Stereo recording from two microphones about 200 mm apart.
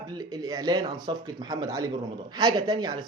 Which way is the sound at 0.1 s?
20° right (ahead or behind).